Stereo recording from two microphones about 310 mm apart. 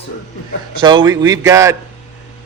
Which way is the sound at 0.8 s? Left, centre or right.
Centre.